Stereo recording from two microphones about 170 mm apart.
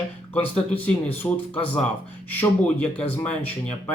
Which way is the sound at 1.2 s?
15° left (ahead or behind).